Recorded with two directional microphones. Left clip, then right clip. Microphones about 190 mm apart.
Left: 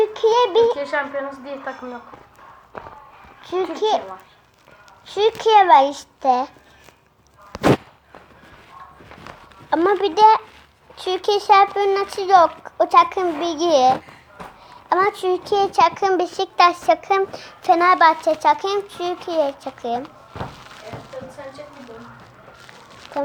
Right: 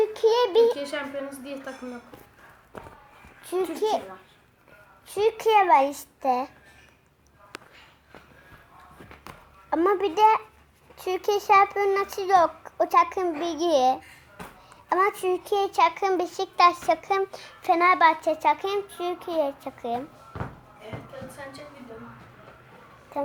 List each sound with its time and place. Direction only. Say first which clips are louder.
0.0 s a sound: left 5 dB; 10° right (ahead or behind)
0.8 s a woman's voice: left 8 dB; 40° right (ahead or behind)
3.4 s babbling: left 5 dB; 10° right (ahead or behind)
3.8 s a child's voice: left 7 dB; 5° right (ahead or behind)
5.0 s a child's voice: left 5 dB; 5° right (ahead or behind)
9.6 s a child's voice: left 5 dB; 5° left (ahead or behind)